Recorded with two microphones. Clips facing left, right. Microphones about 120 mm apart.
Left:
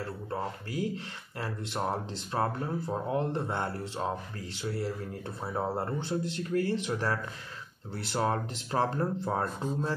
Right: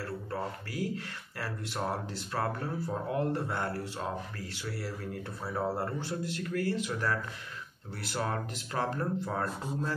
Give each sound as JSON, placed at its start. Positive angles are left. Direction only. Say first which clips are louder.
{"t": 0.0, "sound": "speech", "louder": "left 1 dB", "side_deg": 20}